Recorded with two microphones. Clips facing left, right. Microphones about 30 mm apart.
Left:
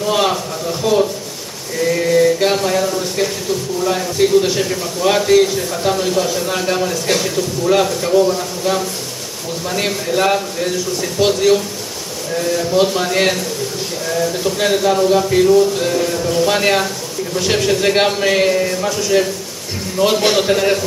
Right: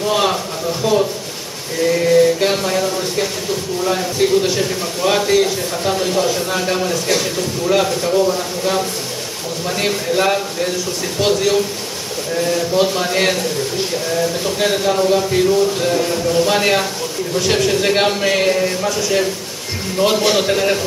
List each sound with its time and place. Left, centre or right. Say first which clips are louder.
0.0 s a man's voice: left 1 dB; centre
20.0 s a man's voice: left 1 dB; right
20.3 s a man's voice: left 1 dB; centre